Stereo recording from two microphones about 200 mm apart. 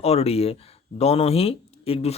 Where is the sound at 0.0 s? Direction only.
30° left (ahead or behind).